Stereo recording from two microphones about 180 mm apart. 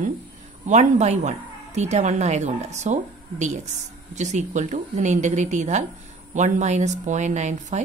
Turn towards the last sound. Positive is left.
turn(degrees=-40)  # may be behind; listen again after turning